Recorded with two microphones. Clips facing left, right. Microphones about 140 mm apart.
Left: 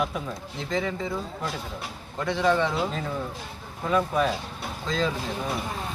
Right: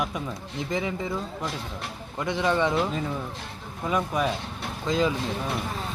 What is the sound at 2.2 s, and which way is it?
Speech, 15° right (ahead or behind).